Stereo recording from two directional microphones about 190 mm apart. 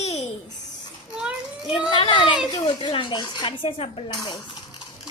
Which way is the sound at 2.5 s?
30° left (ahead or behind).